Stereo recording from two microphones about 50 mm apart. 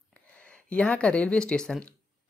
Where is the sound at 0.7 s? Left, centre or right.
Left.